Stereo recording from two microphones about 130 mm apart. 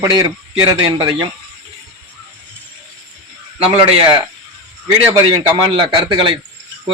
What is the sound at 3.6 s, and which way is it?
Speech, 45° right (ahead or behind).